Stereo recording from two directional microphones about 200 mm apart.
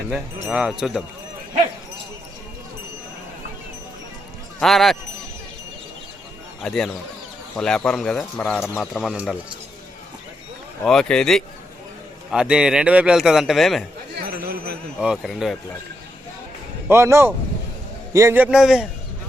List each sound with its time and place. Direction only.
0.4 s a man's voice: 5° right (ahead or behind)
4.6 s a man's voice: centre (ahead or behind)
6.6 s a man's voice: centre (ahead or behind)
10.8 s a man's voice: 5° left (ahead or behind)
14.2 s chatter: 50° right (ahead or behind)
14.9 s a man's voice: centre (ahead or behind)
16.9 s a man's voice: 15° right (ahead or behind)